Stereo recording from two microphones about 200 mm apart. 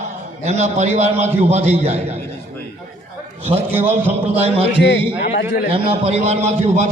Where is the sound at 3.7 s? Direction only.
10° right (ahead or behind).